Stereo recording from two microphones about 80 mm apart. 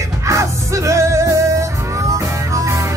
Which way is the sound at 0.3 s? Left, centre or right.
Right.